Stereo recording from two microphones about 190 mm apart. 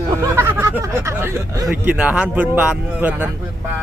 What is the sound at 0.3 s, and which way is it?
Hubbub, 10° right (ahead or behind).